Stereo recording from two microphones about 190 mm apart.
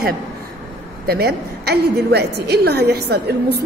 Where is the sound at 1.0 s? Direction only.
55° right (ahead or behind).